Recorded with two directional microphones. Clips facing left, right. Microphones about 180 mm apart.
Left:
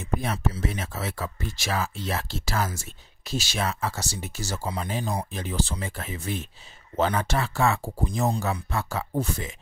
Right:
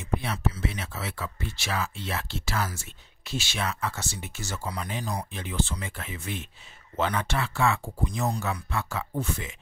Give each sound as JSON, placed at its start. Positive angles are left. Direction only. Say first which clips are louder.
{"t": 0.0, "sound": "speech", "louder": "left 2 dB", "side_deg": 45}